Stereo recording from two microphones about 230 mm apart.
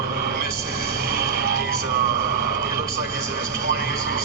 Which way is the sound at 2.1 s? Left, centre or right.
Left.